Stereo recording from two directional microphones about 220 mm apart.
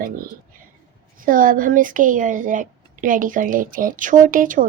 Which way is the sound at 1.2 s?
40° right (ahead or behind).